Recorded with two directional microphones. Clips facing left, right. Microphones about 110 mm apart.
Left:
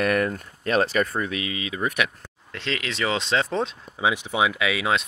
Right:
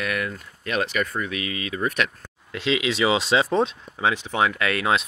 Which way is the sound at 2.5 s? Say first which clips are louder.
Right 6 dB; 5° right (ahead or behind).